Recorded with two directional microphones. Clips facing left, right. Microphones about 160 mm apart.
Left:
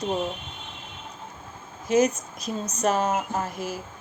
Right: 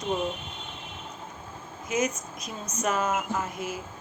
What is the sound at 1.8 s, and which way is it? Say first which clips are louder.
Speech: left 7 dB; 30° left (ahead or behind).